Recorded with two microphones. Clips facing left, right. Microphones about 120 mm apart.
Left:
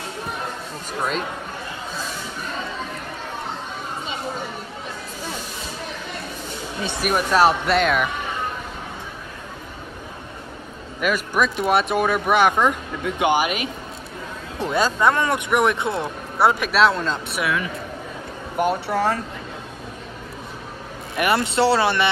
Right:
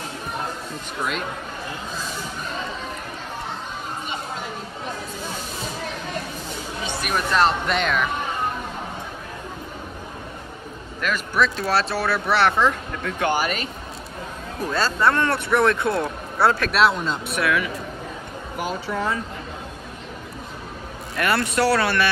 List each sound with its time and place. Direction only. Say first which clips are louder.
7.0 s speech: left 3 dB; 5° left (ahead or behind)
11.0 s speech: left 1 dB; 10° left (ahead or behind)
16.7 s speech: left 1 dB; 5° right (ahead or behind)
18.6 s speech: left 6 dB; 65° left (ahead or behind)
21.2 s speech: left 2 dB; 20° left (ahead or behind)